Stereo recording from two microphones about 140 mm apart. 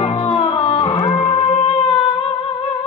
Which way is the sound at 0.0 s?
45° left (ahead or behind).